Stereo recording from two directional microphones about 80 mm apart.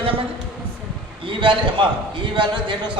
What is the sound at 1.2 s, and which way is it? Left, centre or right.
A man's voice, right.